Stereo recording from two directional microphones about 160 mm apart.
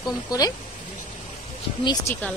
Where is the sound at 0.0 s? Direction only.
25° left (ahead or behind).